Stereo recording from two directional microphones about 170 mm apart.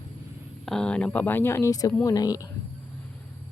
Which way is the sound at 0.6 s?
5° left (ahead or behind).